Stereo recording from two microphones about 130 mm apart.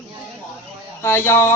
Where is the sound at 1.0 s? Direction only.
20° left (ahead or behind).